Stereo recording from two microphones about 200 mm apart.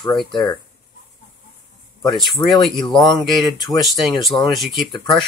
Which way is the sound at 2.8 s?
20° left (ahead or behind).